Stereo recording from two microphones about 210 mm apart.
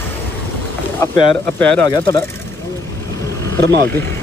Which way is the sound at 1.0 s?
10° left (ahead or behind).